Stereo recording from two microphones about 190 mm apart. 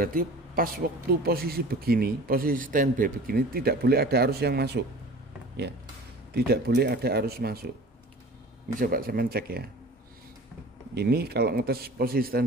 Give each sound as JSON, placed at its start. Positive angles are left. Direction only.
{"t": 0.0, "sound": "speech", "side_deg": -45}
{"t": 6.3, "sound": "speech", "side_deg": -55}
{"t": 8.7, "sound": "speech", "side_deg": -50}
{"t": 11.0, "sound": "speech", "side_deg": -55}